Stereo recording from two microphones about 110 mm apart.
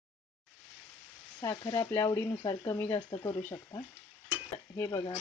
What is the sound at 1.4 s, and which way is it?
Speech, 35° left (ahead or behind).